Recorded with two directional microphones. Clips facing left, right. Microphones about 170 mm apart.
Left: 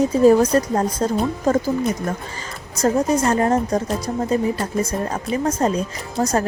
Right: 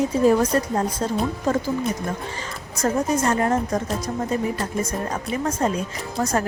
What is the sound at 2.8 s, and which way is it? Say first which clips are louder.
A woman's voice: left 4 dB; 35° left (ahead or behind).